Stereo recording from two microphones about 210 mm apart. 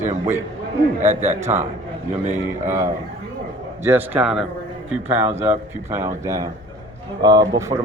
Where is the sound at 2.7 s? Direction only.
15° right (ahead or behind).